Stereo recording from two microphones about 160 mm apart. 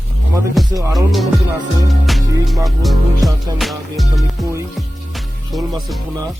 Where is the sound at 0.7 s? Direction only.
20° right (ahead or behind).